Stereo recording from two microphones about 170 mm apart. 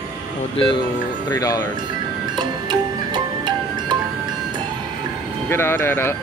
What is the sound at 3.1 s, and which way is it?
Music, 25° right (ahead or behind).